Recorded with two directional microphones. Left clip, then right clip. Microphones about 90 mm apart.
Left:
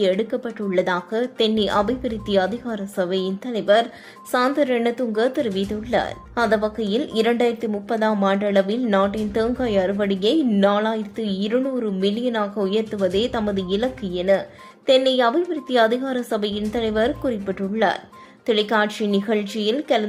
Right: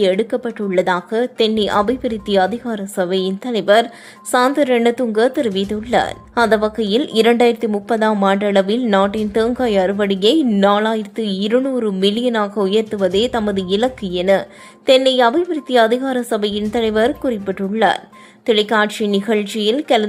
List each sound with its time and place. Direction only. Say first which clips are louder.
0.0 s a woman's voice: right 5 dB; 35° right (ahead or behind)